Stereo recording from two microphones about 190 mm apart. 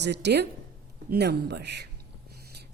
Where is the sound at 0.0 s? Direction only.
65° right (ahead or behind).